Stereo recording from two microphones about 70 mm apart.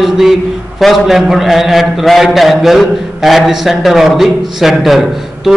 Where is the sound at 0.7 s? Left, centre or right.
Centre.